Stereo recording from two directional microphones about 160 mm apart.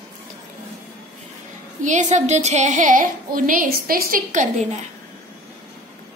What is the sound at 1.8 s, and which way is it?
A woman's voice, 50° right (ahead or behind).